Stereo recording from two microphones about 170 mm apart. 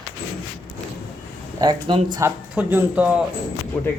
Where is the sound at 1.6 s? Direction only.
30° right (ahead or behind).